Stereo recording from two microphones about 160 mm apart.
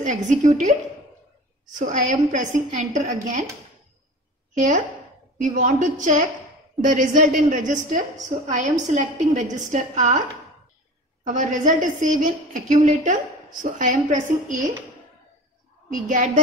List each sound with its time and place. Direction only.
0.0 s a woman's voice: 50° right (ahead or behind)
1.8 s a woman's voice: 50° right (ahead or behind)
4.6 s a woman's voice: 50° right (ahead or behind)
11.2 s a woman's voice: 50° right (ahead or behind)
15.9 s a woman's voice: 55° right (ahead or behind)